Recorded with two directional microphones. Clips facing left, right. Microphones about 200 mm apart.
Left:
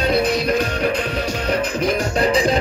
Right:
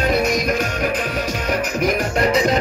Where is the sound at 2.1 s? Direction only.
30° left (ahead or behind).